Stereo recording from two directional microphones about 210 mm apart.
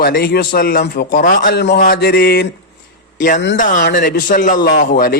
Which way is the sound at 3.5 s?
40° left (ahead or behind).